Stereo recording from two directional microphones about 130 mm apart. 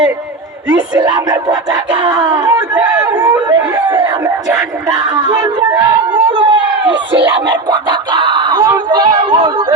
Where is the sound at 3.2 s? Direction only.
30° right (ahead or behind).